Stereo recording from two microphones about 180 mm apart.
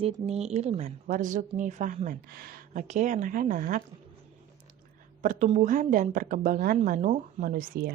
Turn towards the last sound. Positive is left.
turn(degrees=-55)  # may be behind; listen again after turning